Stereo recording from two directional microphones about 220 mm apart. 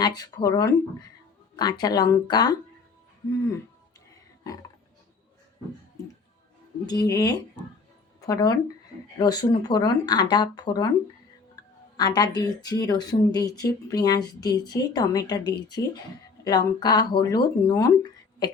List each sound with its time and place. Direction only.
0.0 s speech: 20° left (ahead or behind)
6.8 s speech: 15° left (ahead or behind)
11.9 s speech: 20° left (ahead or behind)